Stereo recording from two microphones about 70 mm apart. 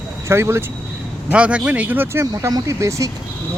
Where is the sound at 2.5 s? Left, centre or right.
Right.